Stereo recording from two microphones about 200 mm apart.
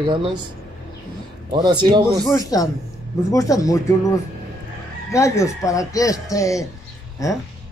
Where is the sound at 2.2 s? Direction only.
15° left (ahead or behind).